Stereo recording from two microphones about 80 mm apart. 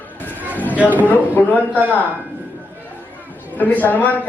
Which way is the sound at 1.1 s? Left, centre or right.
Left.